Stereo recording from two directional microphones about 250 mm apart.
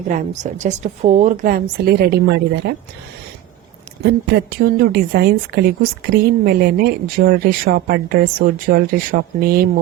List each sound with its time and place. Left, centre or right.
0.1 s speech: right
4.0 s speech: right